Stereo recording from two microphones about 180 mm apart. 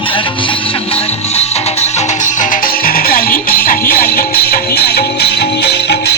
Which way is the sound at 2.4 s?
50° left (ahead or behind).